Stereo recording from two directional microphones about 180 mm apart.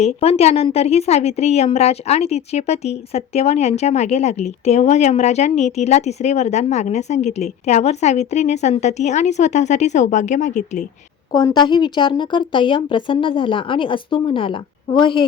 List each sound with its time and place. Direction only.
0.0 s a woman's voice: 35° left (ahead or behind)
11.3 s speech: 20° left (ahead or behind)